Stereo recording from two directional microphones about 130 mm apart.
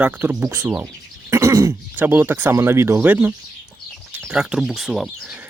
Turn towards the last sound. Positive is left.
turn(degrees=0)  # may be behind; listen again after turning